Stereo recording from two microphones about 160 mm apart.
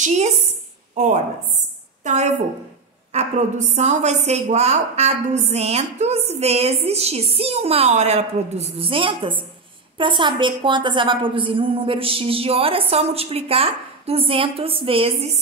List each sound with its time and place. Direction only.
0.0 s a woman's voice: 50° right (ahead or behind)